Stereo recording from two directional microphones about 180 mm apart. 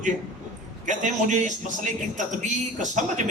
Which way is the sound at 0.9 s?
45° right (ahead or behind).